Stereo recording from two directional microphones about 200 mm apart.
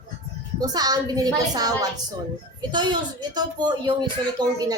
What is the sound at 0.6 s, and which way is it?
A woman's voice, 20° right (ahead or behind).